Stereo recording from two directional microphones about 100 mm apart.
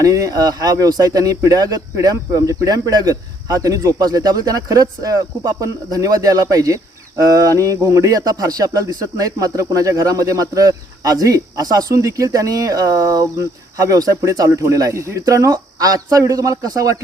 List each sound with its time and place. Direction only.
0.0 s speech: 35° right (ahead or behind)